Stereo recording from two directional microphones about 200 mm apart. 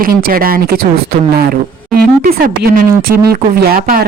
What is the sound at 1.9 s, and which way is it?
A woman's voice, 50° right (ahead or behind).